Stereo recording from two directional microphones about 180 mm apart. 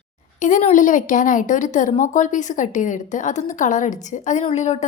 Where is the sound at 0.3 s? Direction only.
45° left (ahead or behind).